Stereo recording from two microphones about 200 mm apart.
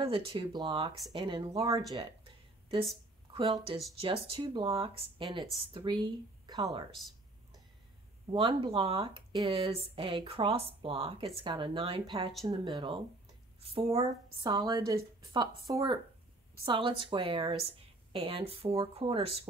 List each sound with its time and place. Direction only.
0.0 s speech: 25° right (ahead or behind)
1.9 s a sound: 20° right (ahead or behind)
4.0 s speech: 30° right (ahead or behind)
8.3 s speech: 25° right (ahead or behind)